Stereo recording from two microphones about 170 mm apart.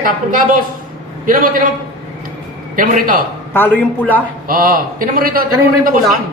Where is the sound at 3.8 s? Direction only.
10° left (ahead or behind).